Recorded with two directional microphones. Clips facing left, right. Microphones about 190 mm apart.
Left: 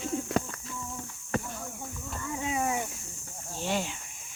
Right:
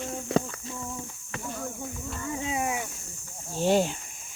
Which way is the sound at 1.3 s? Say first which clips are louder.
Left 6 dB; 45° left (ahead or behind).